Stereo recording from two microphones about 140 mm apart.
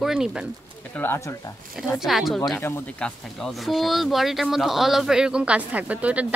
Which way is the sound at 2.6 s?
15° left (ahead or behind).